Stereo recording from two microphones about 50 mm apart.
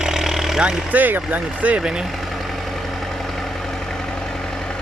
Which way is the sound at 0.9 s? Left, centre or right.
Right.